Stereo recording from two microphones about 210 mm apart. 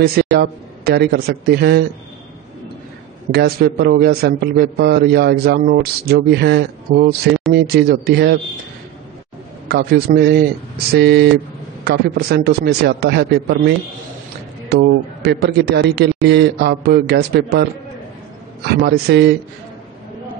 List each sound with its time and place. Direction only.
0.0 s a man's voice: 50° right (ahead or behind)
3.3 s a man's voice: 50° right (ahead or behind)
9.7 s a man's voice: 50° right (ahead or behind)
18.8 s a man's voice: 50° right (ahead or behind)